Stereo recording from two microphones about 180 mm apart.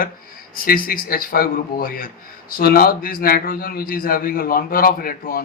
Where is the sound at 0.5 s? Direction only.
55° left (ahead or behind).